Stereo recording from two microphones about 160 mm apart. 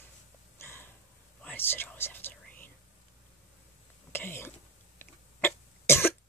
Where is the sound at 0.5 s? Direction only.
15° left (ahead or behind).